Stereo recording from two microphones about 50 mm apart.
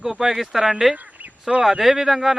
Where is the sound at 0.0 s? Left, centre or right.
Centre.